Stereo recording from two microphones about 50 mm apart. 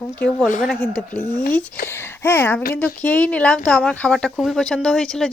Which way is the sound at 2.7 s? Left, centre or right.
Left.